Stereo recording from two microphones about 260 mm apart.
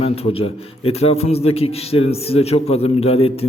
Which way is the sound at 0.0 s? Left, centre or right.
Left.